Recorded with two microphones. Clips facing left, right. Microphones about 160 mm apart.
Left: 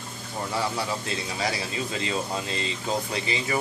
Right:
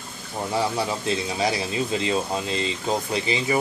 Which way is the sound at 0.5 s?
20° right (ahead or behind).